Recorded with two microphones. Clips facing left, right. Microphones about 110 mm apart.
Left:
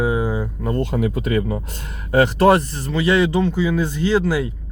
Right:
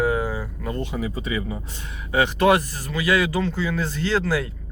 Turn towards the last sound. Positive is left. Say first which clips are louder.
# left 4 dB
turn(degrees=15)  # may be behind; listen again after turning